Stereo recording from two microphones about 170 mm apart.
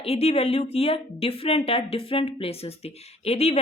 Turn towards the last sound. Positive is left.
turn(degrees=40)  # may be behind; listen again after turning